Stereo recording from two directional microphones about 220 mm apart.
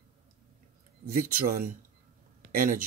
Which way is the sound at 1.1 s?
35° right (ahead or behind).